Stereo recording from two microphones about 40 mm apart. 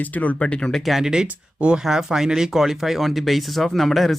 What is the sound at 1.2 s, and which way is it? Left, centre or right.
Speech, right.